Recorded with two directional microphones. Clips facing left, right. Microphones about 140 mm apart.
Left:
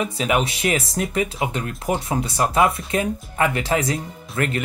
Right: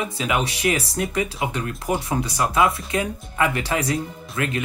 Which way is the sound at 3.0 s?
40° left (ahead or behind).